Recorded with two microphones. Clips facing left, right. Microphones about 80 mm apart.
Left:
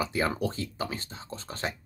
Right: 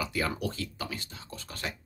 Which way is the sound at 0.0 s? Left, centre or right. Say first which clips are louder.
Left 3 dB; left.